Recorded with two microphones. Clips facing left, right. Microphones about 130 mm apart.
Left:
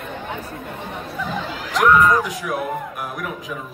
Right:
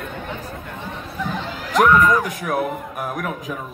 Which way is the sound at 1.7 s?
55° right (ahead or behind).